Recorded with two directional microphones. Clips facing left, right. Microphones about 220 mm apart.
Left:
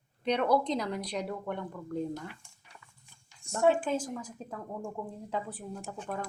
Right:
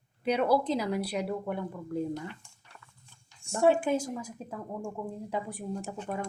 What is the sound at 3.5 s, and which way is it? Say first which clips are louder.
Speech: right 2 dB; 10° right (ahead or behind).